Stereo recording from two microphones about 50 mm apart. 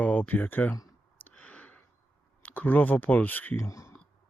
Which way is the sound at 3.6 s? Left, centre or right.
Left.